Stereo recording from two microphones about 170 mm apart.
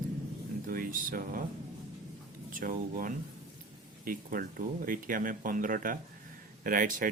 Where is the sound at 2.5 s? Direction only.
55° right (ahead or behind).